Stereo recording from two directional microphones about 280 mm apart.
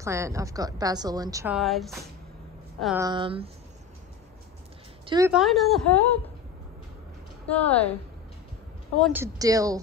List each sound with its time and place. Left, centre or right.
0.0 s a woman's voice: centre
3.1 s a woman's voice: centre
5.0 s speech: centre
5.3 s a woman's voice: centre
7.4 s a woman's voice: centre
9.0 s a woman's voice: centre